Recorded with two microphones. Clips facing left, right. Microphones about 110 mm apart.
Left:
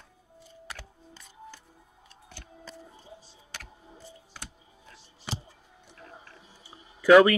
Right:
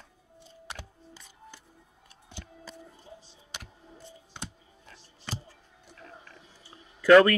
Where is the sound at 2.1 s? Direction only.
20° right (ahead or behind).